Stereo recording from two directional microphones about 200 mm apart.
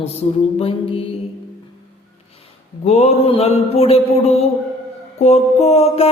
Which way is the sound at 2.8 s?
35° left (ahead or behind).